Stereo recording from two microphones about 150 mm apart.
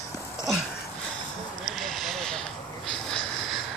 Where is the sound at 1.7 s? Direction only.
Centre (ahead or behind).